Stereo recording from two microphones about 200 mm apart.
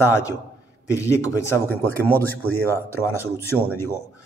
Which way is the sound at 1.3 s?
15° left (ahead or behind).